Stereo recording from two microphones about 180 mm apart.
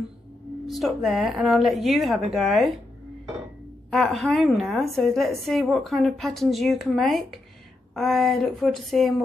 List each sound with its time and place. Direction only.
0.7 s a woman's voice: centre (ahead or behind)
3.9 s a woman's voice: centre (ahead or behind)